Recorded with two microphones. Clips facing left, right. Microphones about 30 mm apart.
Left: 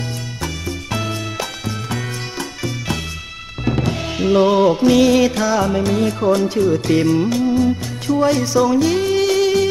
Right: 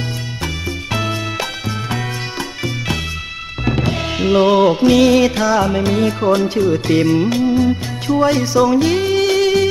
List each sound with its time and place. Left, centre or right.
0.9 s music: right
3.6 s music: right
4.9 s speech: centre